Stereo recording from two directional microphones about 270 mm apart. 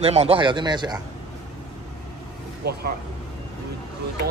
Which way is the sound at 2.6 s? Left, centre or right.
Right.